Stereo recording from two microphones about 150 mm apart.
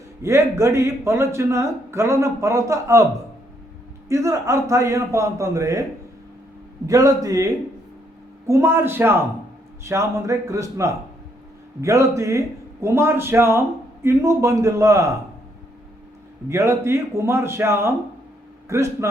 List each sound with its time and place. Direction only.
0.2 s speech: 20° right (ahead or behind)
4.1 s speech: 20° right (ahead or behind)
6.8 s a man's voice: 20° right (ahead or behind)
16.5 s a man's voice: 20° right (ahead or behind)